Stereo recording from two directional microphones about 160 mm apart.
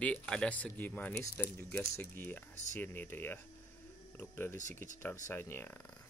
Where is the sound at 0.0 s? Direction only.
5° left (ahead or behind).